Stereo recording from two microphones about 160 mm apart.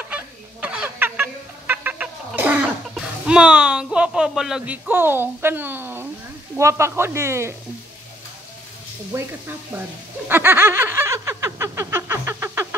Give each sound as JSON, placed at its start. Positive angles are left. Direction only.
{"t": 0.0, "sound": "fowl", "side_deg": -10}
{"t": 6.5, "sound": "speech", "side_deg": -15}
{"t": 9.1, "sound": "speech", "side_deg": -15}
{"t": 10.2, "sound": "snicker", "side_deg": -10}